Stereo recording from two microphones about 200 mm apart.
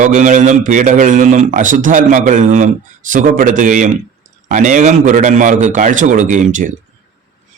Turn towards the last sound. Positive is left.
turn(degrees=-40)  # may be behind; listen again after turning